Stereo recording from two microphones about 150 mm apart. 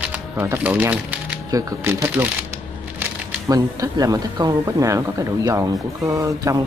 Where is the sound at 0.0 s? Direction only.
15° right (ahead or behind).